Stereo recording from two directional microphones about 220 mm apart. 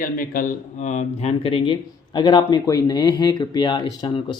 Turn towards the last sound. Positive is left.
turn(degrees=20)  # may be behind; listen again after turning